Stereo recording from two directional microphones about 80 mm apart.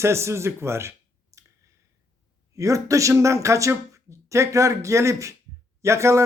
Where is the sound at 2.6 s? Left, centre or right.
Right.